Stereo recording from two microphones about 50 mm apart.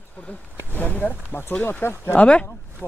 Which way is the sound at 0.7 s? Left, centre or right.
Left.